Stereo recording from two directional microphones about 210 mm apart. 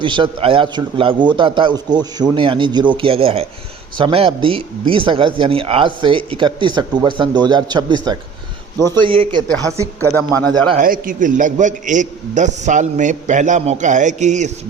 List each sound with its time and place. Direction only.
0.0 s speech: 20° right (ahead or behind)
10.8 s a man's voice: 40° right (ahead or behind)